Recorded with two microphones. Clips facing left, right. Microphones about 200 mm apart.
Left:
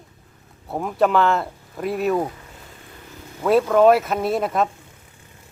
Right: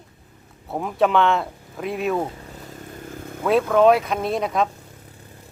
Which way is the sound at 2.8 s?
50° right (ahead or behind).